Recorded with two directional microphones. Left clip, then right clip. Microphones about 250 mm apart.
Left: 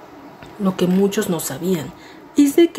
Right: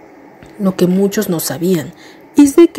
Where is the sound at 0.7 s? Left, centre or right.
Centre.